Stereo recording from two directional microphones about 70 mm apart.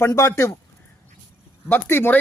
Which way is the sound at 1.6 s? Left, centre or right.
Left.